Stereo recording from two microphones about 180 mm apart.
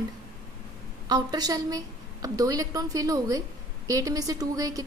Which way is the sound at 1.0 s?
20° right (ahead or behind).